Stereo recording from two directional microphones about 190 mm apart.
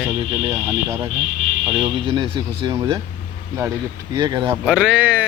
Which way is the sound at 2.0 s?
25° right (ahead or behind).